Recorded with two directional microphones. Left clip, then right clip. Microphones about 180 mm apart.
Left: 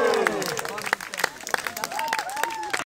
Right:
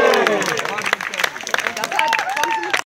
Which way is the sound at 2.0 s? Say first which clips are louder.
Right 10 dB; 35° right (ahead or behind).